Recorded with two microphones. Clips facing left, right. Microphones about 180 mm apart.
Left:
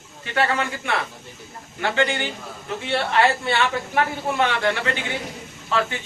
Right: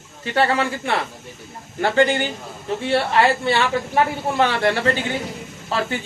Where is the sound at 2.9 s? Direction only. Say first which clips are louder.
Right 2 dB; 30° right (ahead or behind).